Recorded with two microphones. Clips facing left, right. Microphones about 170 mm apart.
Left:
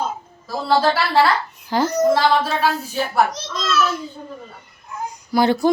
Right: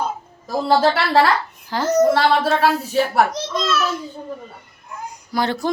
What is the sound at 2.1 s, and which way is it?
Speech, 70° right (ahead or behind).